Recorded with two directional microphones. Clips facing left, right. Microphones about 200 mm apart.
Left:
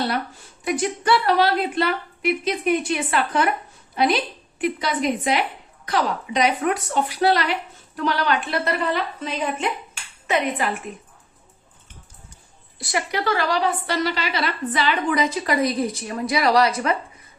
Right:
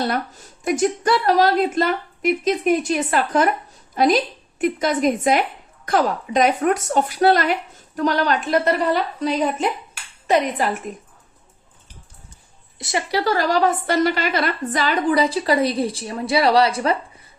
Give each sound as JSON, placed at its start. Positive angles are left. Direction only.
{"t": 0.1, "sound": "a woman's voice", "side_deg": -45}
{"t": 12.8, "sound": "a woman's voice", "side_deg": -30}